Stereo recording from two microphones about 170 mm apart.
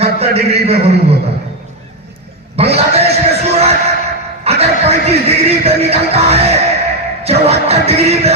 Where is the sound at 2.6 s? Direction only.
35° right (ahead or behind).